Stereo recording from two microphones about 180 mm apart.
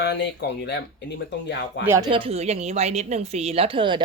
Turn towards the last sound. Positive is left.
turn(degrees=-30)  # may be behind; listen again after turning